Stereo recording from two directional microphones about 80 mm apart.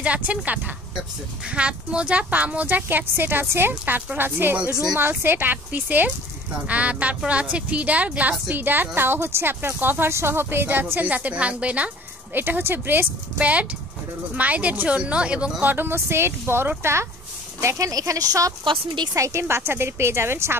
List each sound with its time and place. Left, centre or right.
0.0 s speech: centre
1.4 s a woman's voice: centre
15.6 s speech: right
18.6 s speech: right
19.1 s speech: right